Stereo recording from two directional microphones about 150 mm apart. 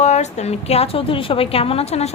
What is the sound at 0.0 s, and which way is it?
A woman's voice, 50° left (ahead or behind).